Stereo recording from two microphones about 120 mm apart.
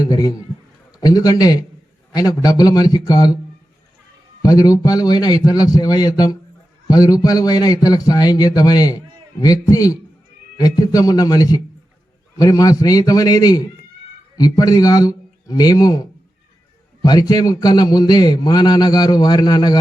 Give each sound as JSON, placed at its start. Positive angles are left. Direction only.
{"t": 0.0, "sound": "a man's voice", "side_deg": 30}
{"t": 4.4, "sound": "a man's voice", "side_deg": 30}
{"t": 17.0, "sound": "a man's voice", "side_deg": 30}